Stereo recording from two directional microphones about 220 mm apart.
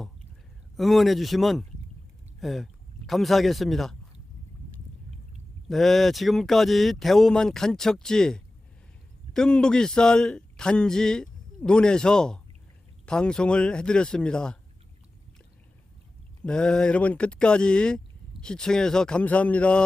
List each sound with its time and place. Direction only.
0.8 s a man's voice: centre (ahead or behind)
5.6 s a man's voice: centre (ahead or behind)
16.4 s a man's voice: 5° left (ahead or behind)